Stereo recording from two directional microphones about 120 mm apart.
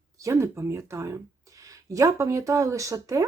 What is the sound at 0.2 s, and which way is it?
Speech, 25° right (ahead or behind).